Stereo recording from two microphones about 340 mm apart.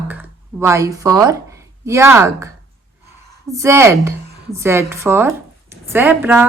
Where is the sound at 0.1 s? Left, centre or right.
Centre.